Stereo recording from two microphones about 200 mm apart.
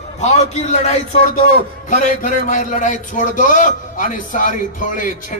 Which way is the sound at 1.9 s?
40° left (ahead or behind).